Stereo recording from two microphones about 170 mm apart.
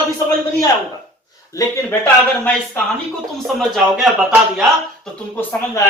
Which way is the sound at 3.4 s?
Centre (ahead or behind).